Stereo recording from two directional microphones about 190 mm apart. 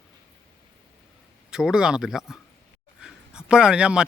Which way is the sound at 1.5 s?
5° right (ahead or behind).